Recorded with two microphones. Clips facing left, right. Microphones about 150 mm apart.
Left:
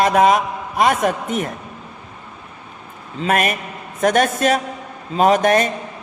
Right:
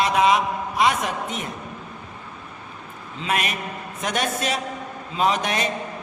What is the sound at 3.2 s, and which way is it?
A man's voice, 50° left (ahead or behind).